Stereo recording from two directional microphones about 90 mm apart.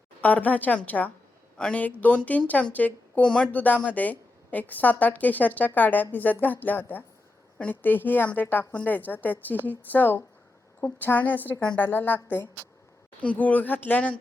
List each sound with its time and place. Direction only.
0.2 s a woman's voice: 15° left (ahead or behind)